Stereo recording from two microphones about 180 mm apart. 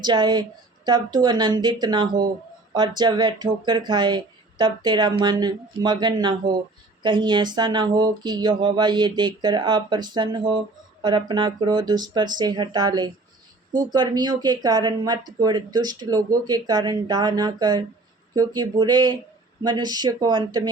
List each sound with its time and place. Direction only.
0.0 s speech: 25° right (ahead or behind)